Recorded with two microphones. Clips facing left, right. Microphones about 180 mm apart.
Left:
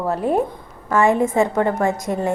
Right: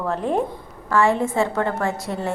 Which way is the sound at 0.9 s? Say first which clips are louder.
Left 2 dB; 20° left (ahead or behind).